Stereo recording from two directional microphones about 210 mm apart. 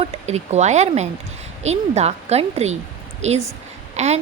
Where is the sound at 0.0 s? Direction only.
30° right (ahead or behind).